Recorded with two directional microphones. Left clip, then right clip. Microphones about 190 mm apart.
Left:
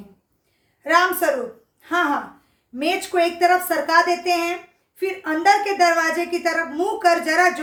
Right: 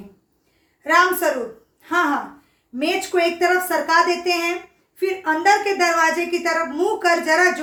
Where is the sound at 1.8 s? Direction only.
15° left (ahead or behind).